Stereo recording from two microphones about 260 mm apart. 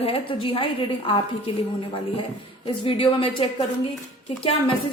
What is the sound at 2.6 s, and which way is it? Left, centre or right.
A woman's voice, centre.